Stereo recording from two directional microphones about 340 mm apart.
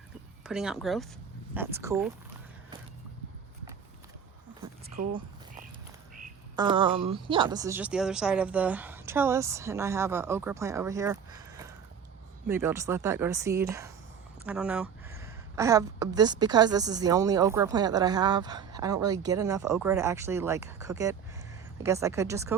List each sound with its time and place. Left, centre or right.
0.4 s a woman's voice: centre
4.6 s a sound: centre
6.6 s a woman's voice: centre